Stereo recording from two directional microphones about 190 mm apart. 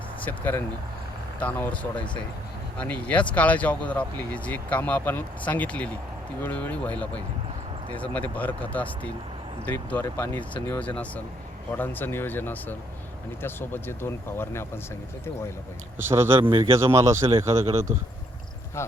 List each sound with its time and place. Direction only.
0.2 s speech: 10° left (ahead or behind)
16.0 s speech: 10° right (ahead or behind)
16.4 s a man's voice: 25° right (ahead or behind)
16.9 s speech: 15° right (ahead or behind)
18.8 s speech: 15° left (ahead or behind)